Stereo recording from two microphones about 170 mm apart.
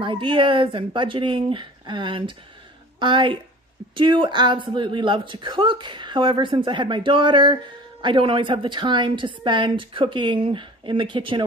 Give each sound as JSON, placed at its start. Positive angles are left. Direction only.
{"t": 0.0, "sound": "a man's voice", "side_deg": -30}